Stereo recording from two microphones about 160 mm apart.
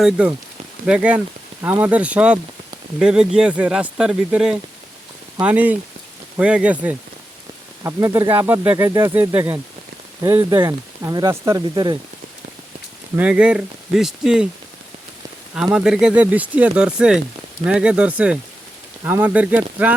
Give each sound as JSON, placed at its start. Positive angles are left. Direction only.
{"t": 0.0, "sound": "speech", "side_deg": -5}
{"t": 7.9, "sound": "speech", "side_deg": -20}
{"t": 13.1, "sound": "speech", "side_deg": -10}
{"t": 15.5, "sound": "speech", "side_deg": -5}